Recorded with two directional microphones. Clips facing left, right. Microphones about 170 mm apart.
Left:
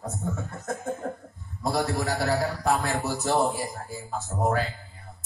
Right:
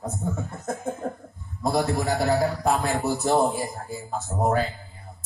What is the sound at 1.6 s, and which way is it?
A man's voice, 20° right (ahead or behind).